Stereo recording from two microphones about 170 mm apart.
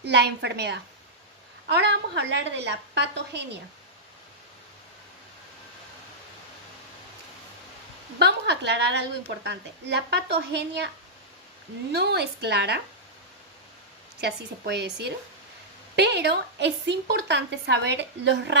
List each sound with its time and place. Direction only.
0.0 s a woman's voice: 80° right
8.2 s a woman's voice: 85° right
14.2 s a woman's voice: 75° right (ahead or behind)